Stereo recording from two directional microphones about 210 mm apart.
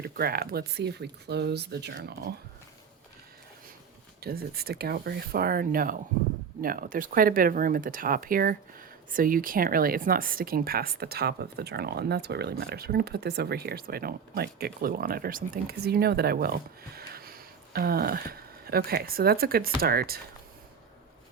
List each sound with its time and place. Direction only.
0.0 s speech: 45° right (ahead or behind)
4.2 s speech: 45° right (ahead or behind)